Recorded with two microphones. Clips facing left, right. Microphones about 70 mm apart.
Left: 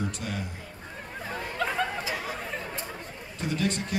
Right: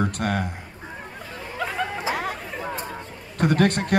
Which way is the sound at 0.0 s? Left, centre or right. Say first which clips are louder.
Right 8 dB; right.